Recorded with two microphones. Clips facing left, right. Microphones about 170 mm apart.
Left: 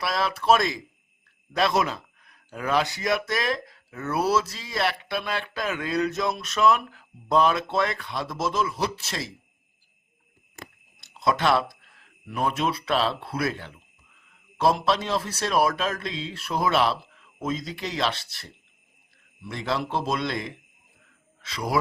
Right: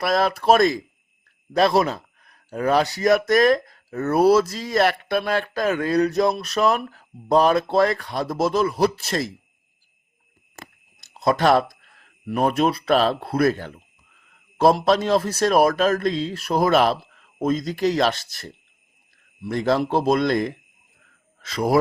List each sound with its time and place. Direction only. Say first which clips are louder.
0.0 s a man's voice: right 6 dB; 45° right (ahead or behind)
11.1 s a man's voice: right 5 dB; 40° right (ahead or behind)
19.5 s a man's voice: right 8 dB; 45° right (ahead or behind)